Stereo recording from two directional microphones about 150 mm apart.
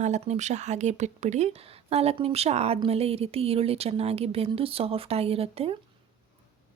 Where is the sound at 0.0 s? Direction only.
50° right (ahead or behind).